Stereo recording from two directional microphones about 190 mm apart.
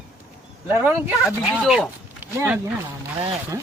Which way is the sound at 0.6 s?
10° right (ahead or behind).